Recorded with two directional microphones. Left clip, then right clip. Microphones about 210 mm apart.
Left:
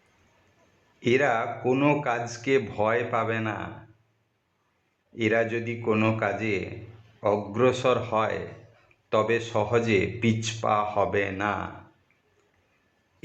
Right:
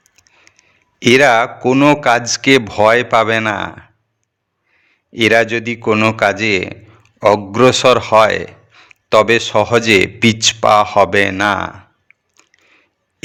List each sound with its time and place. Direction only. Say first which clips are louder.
0.9 s a man's voice: right 14 dB; 50° right (ahead or behind)
1.7 s a man's voice: right 13 dB; 35° right (ahead or behind)
2.0 s a man's voice: right 15 dB; 55° right (ahead or behind)
5.1 s a man's voice: right 13 dB; 55° right (ahead or behind); by 6.1 s 35° right (ahead or behind)
6.4 s a man's voice: right 14 dB; 55° right (ahead or behind)
7.2 s a man's voice: right 13 dB; 40° right (ahead or behind)